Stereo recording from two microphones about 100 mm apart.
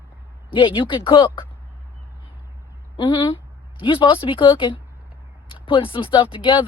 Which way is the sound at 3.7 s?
60° left (ahead or behind).